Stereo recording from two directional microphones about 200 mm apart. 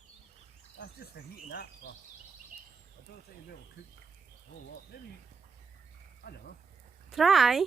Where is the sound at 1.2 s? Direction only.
60° left (ahead or behind).